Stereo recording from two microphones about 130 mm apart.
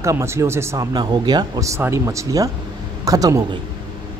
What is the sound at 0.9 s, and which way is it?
A man's voice, 35° right (ahead or behind).